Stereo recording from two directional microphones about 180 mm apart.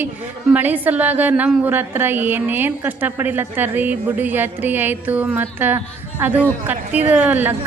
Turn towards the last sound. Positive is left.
turn(degrees=-10)  # may be behind; listen again after turning